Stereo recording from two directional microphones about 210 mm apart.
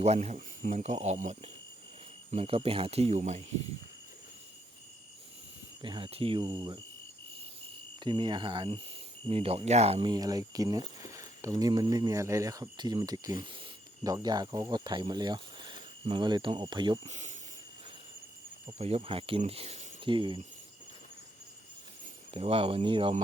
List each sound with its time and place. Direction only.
0.0 s speech: 30° right (ahead or behind)
5.8 s speech: 25° right (ahead or behind)
7.9 s speech: 20° right (ahead or behind)
17.1 s speech: 35° right (ahead or behind)
18.6 s speech: 30° right (ahead or behind)
22.3 s speech: 30° right (ahead or behind)